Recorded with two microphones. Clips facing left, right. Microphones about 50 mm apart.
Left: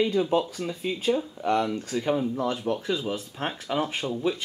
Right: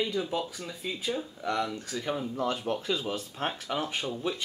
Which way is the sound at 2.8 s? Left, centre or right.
Left.